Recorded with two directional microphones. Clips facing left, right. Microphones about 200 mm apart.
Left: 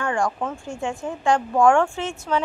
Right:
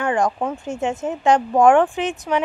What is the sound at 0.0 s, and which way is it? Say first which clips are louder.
Speech: right 4 dB; 20° right (ahead or behind).